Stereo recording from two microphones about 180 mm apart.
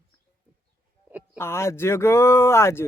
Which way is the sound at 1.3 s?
15° left (ahead or behind).